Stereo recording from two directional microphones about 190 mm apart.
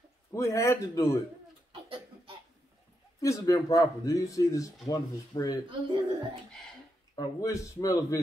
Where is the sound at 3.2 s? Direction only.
20° left (ahead or behind).